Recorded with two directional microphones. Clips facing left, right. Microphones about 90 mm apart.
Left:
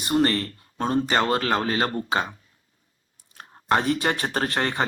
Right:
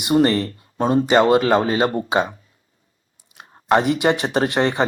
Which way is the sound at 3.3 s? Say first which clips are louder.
Right 5 dB; 20° right (ahead or behind).